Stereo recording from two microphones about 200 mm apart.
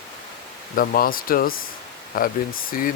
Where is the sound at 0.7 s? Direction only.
45° left (ahead or behind).